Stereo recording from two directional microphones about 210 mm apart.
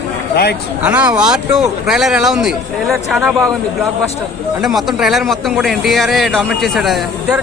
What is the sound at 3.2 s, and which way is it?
Speech, 15° right (ahead or behind).